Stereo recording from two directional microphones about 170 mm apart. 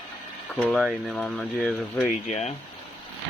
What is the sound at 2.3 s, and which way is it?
Speech, 40° left (ahead or behind).